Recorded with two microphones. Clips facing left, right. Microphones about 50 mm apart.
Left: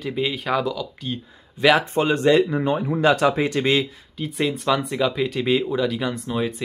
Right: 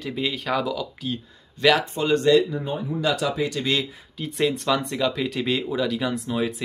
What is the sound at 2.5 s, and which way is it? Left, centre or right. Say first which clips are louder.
Speech: left 6 dB; left.